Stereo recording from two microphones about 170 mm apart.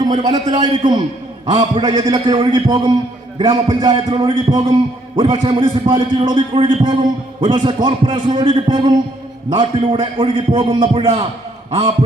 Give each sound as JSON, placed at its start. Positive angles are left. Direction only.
{"t": 0.0, "sound": "a man's voice", "side_deg": -20}